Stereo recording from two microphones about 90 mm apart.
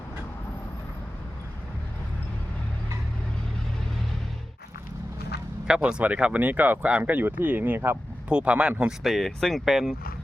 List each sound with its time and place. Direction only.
5.6 s speech: 10° right (ahead or behind)
8.3 s speech: 10° right (ahead or behind)